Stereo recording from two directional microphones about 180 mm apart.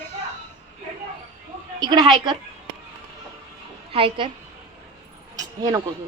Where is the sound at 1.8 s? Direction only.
25° right (ahead or behind).